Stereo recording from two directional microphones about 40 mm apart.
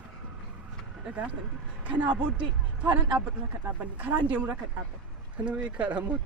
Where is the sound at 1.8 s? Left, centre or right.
Right.